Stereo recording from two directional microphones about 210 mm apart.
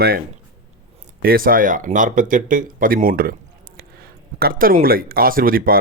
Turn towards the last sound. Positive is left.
turn(degrees=-45)  # may be behind; listen again after turning